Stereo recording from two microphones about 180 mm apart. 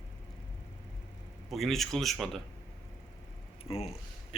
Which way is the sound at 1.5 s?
Centre (ahead or behind).